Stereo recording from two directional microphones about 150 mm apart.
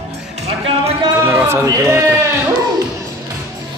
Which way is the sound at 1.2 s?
15° right (ahead or behind).